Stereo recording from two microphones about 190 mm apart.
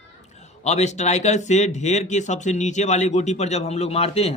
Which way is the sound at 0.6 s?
35° left (ahead or behind).